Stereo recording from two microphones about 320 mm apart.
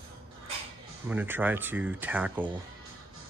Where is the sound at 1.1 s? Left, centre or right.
Centre.